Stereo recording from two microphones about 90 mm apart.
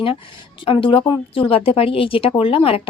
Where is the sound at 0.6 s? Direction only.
80° left.